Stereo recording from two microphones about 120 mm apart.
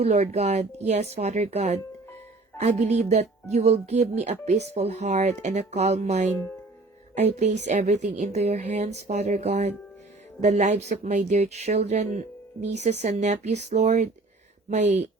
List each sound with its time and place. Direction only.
0.0 s speech: 65° right (ahead or behind)